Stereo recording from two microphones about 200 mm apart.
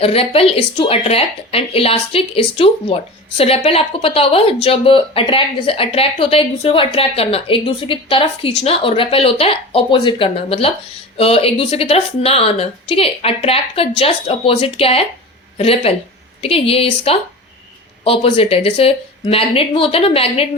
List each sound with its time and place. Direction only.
0.0 s speech: 30° left (ahead or behind)